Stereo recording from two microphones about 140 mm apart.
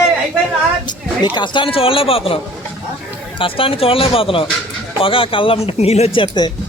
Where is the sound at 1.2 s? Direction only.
35° left (ahead or behind).